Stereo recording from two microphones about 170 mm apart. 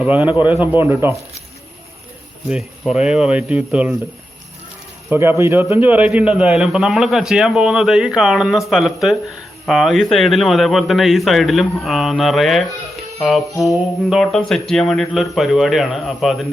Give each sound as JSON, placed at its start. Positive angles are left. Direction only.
{"t": 0.2, "sound": "a man's voice", "side_deg": 25}
{"t": 0.4, "sound": "speech", "side_deg": -10}
{"t": 2.5, "sound": "a man's voice", "side_deg": 0}
{"t": 5.1, "sound": "a man's voice", "side_deg": -15}